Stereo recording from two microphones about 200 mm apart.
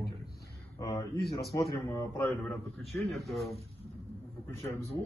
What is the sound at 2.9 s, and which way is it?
Speech, centre (ahead or behind).